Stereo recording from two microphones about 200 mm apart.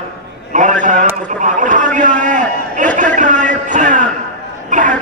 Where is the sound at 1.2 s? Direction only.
40° right (ahead or behind).